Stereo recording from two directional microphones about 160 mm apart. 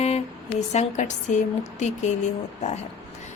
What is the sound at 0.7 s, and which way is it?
Mantra, 45° left (ahead or behind).